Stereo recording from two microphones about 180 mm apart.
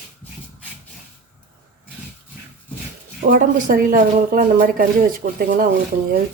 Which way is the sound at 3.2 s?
50° right (ahead or behind).